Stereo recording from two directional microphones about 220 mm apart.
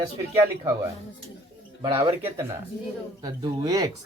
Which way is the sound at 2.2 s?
10° right (ahead or behind).